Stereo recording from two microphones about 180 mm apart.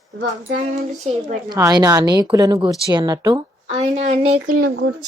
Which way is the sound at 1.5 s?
20° right (ahead or behind).